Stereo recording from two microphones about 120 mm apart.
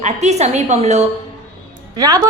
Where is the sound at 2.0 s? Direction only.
30° right (ahead or behind).